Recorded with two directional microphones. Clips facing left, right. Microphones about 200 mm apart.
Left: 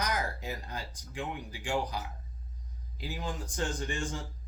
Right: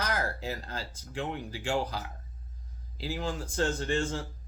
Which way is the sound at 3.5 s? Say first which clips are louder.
Right 7 dB; 15° left (ahead or behind).